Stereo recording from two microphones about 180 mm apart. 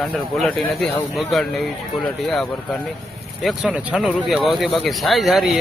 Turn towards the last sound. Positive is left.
turn(degrees=0)  # may be behind; listen again after turning